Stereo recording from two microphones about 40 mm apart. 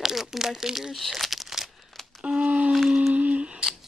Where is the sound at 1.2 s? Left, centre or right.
Centre.